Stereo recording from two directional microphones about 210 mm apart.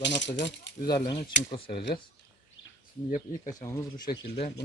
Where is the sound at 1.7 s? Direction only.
55° left (ahead or behind).